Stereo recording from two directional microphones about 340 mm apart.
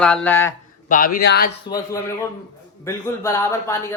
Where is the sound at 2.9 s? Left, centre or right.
Centre.